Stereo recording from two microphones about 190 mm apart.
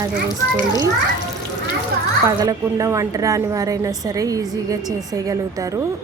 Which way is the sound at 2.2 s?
20° right (ahead or behind).